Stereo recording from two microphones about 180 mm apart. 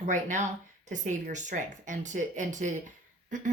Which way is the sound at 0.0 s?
40° right (ahead or behind).